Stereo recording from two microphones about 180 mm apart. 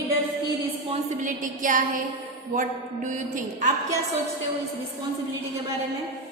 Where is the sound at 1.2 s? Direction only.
45° right (ahead or behind).